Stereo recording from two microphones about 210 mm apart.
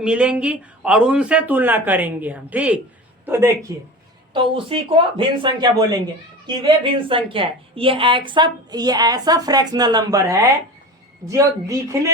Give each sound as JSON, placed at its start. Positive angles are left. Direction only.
{"t": 0.0, "sound": "a man's voice", "side_deg": -5}
{"t": 4.5, "sound": "a woman's voice", "side_deg": -25}